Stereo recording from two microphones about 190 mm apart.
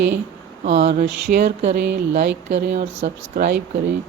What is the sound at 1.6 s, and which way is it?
Speech, 60° right (ahead or behind).